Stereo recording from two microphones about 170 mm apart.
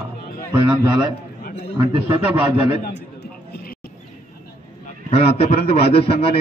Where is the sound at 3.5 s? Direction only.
60° left (ahead or behind).